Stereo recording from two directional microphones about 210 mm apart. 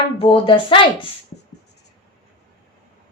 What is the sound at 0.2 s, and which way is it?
Speech, 25° left (ahead or behind).